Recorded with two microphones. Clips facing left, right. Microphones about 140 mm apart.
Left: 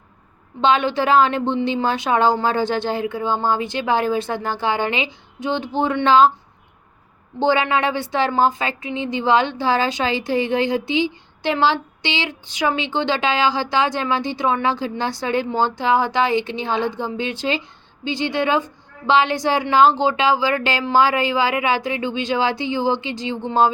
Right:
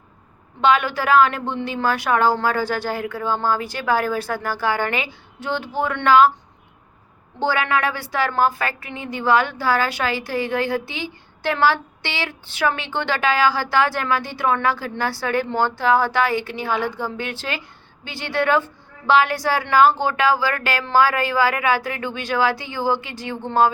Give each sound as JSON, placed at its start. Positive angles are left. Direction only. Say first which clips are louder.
{"t": 0.6, "sound": "a woman's voice", "louder": "left 1 dB", "side_deg": 25}
{"t": 7.4, "sound": "a woman's voice", "louder": "left 3 dB", "side_deg": 25}